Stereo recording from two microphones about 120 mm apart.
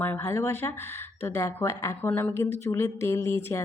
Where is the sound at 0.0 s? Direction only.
15° left (ahead or behind).